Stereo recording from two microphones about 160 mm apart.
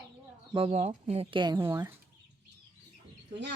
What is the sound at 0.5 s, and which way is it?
Speech, 40° right (ahead or behind).